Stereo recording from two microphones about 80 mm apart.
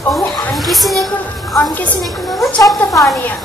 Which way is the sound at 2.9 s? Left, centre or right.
Centre.